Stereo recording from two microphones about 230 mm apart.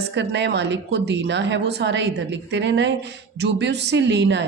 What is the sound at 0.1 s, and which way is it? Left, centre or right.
Speech, right.